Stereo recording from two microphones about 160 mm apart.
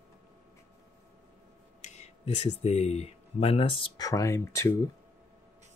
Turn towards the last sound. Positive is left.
turn(degrees=20)  # may be behind; listen again after turning